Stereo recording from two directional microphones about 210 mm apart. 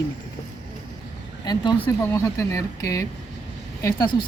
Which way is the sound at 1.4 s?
20° left (ahead or behind).